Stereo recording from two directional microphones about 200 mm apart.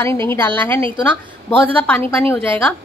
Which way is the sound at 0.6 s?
10° left (ahead or behind).